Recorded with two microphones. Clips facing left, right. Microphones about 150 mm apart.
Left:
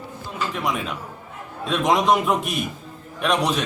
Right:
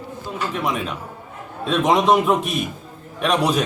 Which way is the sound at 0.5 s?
Centre (ahead or behind).